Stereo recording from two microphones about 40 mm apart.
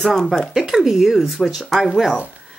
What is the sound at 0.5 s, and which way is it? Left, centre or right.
Speech, centre.